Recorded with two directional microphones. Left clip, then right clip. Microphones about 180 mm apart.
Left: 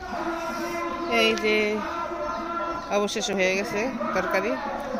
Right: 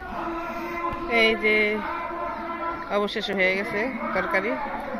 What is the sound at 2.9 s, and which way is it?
Speech, 10° left (ahead or behind).